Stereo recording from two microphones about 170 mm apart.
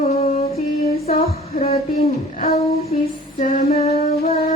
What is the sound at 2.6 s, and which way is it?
Female singing, 40° left (ahead or behind).